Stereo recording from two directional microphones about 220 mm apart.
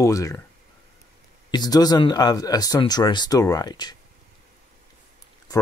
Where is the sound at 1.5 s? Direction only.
15° left (ahead or behind).